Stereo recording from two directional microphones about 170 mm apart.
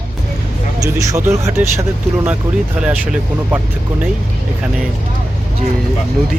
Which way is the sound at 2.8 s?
5° right (ahead or behind).